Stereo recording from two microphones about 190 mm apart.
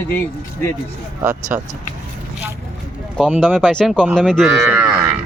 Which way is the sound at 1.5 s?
10° right (ahead or behind).